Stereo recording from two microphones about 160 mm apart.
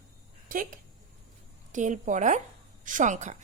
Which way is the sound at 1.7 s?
50° right (ahead or behind).